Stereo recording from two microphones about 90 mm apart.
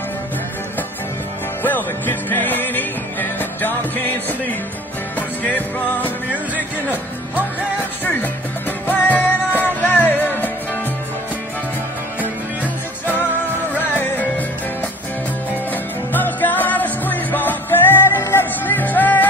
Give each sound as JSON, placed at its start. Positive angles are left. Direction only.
{"t": 1.6, "sound": "music", "side_deg": 20}
{"t": 8.0, "sound": "music", "side_deg": 20}
{"t": 13.7, "sound": "music", "side_deg": 20}
{"t": 15.7, "sound": "music", "side_deg": 20}